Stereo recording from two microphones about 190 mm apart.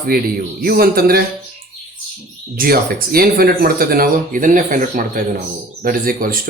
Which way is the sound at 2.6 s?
50° right (ahead or behind).